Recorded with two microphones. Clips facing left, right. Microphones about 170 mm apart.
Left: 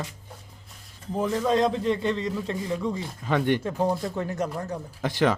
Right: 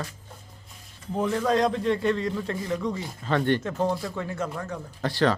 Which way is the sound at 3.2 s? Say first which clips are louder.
Even; 10° left (ahead or behind).